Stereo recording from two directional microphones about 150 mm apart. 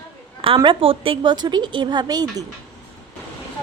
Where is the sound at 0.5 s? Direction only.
35° right (ahead or behind).